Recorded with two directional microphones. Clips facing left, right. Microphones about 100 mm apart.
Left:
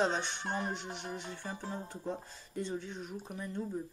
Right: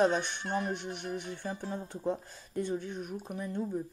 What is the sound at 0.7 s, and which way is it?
Speech, 55° right (ahead or behind).